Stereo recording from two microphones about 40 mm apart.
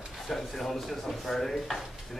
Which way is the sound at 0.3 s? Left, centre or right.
Centre.